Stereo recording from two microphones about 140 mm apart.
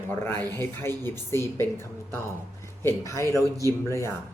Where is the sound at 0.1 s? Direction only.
15° left (ahead or behind).